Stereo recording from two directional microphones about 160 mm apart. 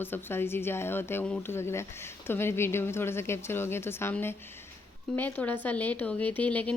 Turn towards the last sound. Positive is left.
turn(degrees=10)  # may be behind; listen again after turning